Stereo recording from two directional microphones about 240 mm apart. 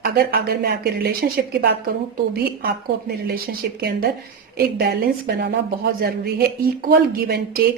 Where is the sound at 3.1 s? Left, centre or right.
Right.